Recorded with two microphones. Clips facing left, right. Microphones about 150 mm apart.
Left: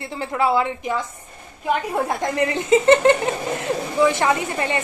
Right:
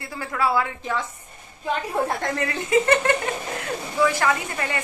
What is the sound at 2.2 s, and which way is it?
A woman's voice, 20° left (ahead or behind).